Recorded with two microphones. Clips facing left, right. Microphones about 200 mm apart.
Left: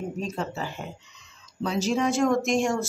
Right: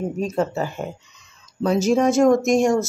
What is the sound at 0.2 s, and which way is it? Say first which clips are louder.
Speech: right 11 dB; 45° right (ahead or behind).